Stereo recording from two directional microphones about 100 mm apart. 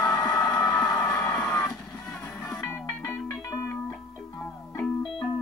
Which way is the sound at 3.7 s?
20° left (ahead or behind).